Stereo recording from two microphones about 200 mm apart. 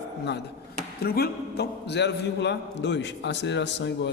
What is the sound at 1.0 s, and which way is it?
A man's voice, 50° left (ahead or behind).